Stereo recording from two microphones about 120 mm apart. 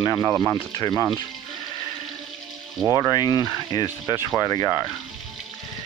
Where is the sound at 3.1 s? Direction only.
35° left (ahead or behind).